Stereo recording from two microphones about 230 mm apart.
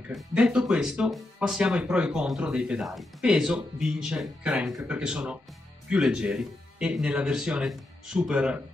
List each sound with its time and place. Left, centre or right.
0.1 s speech: centre